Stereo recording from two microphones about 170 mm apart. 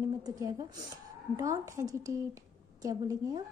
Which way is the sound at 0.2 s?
20° right (ahead or behind).